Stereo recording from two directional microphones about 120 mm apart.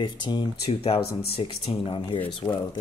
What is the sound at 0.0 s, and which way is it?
Speech, 40° left (ahead or behind).